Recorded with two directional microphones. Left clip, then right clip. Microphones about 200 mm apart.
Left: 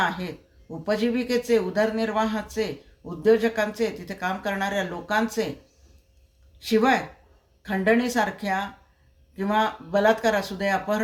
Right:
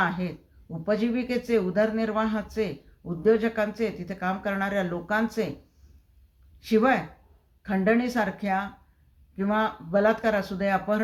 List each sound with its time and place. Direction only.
0.9 s speech: 15° left (ahead or behind)
6.7 s speech: 15° left (ahead or behind)